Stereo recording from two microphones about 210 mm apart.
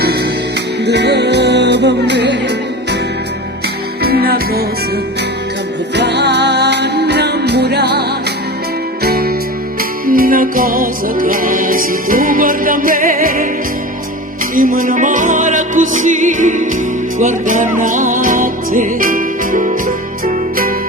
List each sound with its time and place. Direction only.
0.9 s music: 55° right (ahead or behind)
4.0 s music: 45° right (ahead or behind)
6.0 s music: 55° right (ahead or behind)
9.0 s music: 45° right (ahead or behind)
14.5 s music: 40° right (ahead or behind)